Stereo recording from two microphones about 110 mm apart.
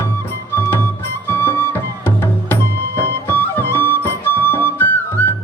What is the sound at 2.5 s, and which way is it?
Music, 20° left (ahead or behind).